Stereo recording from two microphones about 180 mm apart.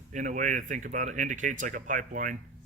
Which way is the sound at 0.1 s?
45° right (ahead or behind).